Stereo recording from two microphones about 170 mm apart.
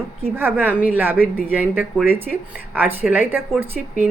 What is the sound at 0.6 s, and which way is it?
A woman's voice, 10° right (ahead or behind).